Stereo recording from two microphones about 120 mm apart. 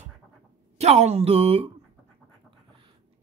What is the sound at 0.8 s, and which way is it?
Speech, 65° right (ahead or behind).